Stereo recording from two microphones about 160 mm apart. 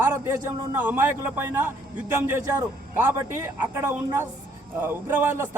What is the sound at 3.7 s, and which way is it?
A man's voice, 15° right (ahead or behind).